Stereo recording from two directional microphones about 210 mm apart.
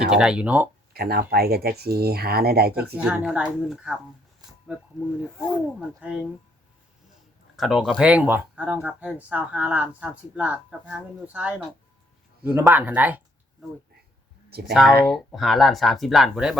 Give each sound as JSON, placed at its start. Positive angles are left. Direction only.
{"t": 0.0, "sound": "speech", "side_deg": -5}
{"t": 0.9, "sound": "speech", "side_deg": -45}
{"t": 2.7, "sound": "speech", "side_deg": -5}
{"t": 5.2, "sound": "speech", "side_deg": 5}
{"t": 6.0, "sound": "speech", "side_deg": -5}
{"t": 7.5, "sound": "speech", "side_deg": 0}
{"t": 14.7, "sound": "speech", "side_deg": 0}